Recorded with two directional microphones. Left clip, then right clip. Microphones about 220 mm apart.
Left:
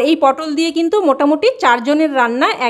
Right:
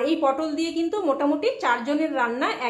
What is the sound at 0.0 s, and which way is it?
A woman's voice, 50° left (ahead or behind).